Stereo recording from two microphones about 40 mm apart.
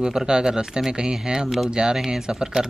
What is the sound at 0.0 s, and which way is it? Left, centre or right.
Speech, centre.